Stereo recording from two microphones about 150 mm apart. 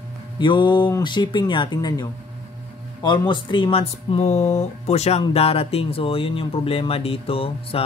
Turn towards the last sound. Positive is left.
turn(degrees=40)  # may be behind; listen again after turning